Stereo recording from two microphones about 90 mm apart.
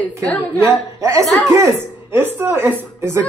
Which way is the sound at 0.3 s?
15° left (ahead or behind).